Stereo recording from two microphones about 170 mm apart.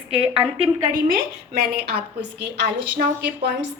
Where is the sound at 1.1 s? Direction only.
65° right (ahead or behind).